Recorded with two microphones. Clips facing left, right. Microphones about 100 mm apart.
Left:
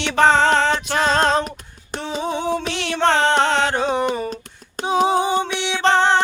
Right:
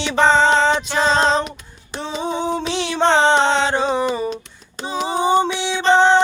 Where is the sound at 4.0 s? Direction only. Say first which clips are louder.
Right 1 dB; 50° left (ahead or behind).